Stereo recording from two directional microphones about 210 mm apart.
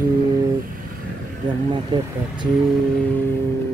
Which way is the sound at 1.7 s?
20° right (ahead or behind).